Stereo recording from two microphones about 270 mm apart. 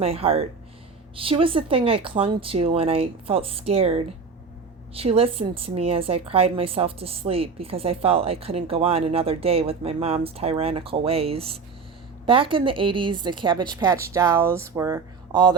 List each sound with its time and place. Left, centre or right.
0.0 s a woman's voice: right